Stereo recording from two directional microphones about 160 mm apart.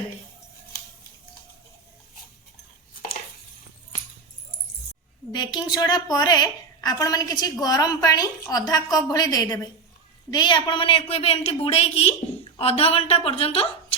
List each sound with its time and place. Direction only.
5.3 s a woman's voice: 25° left (ahead or behind)